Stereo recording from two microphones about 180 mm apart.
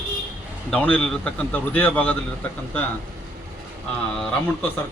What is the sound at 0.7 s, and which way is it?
Speech, 10° left (ahead or behind).